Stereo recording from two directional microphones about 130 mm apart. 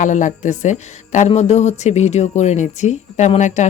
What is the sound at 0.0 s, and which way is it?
A woman's voice, 75° left (ahead or behind).